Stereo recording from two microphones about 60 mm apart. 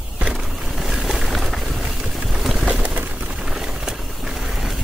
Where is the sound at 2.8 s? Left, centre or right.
Right.